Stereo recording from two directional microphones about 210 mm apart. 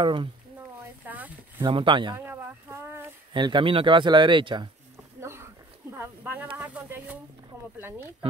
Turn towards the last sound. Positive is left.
turn(degrees=-10)  # may be behind; listen again after turning